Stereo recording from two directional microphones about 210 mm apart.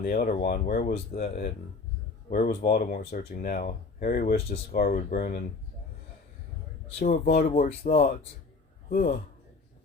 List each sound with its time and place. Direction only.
0.0 s speech: 40° left (ahead or behind)
7.0 s speech: 45° left (ahead or behind)